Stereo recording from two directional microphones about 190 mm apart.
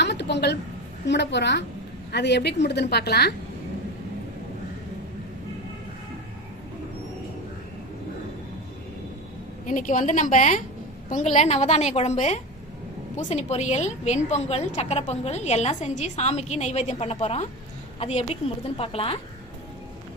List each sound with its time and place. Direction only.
0.0 s a sound: 65° left (ahead or behind)
1.0 s a woman's voice: 65° left (ahead or behind)
9.6 s a woman's voice: 40° left (ahead or behind)